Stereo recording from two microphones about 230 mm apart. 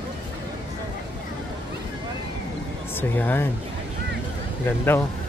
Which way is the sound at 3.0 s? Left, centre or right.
Centre.